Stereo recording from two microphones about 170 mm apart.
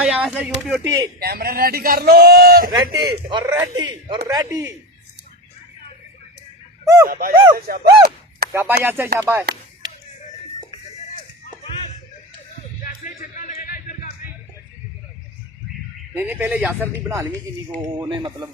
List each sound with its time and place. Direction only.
0.0 s speech: 5° right (ahead or behind)
1.2 s a man's voice: 65° right (ahead or behind)
2.7 s a man's voice: 25° right (ahead or behind)
6.8 s speech: 20° right (ahead or behind)
7.1 s a man's voice: 60° right (ahead or behind)
7.7 s a sound: 70° right (ahead or behind)
8.5 s speech: 15° right (ahead or behind)
12.8 s music: 55° left (ahead or behind)
16.1 s speech: 10° right (ahead or behind)
18.1 s a man's voice: 25° right (ahead or behind)